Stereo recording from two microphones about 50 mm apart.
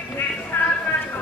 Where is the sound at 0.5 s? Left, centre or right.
Left.